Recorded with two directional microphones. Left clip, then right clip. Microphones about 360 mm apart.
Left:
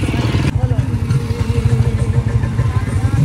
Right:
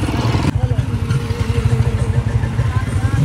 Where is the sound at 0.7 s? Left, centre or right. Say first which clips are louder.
Left 1 dB; centre.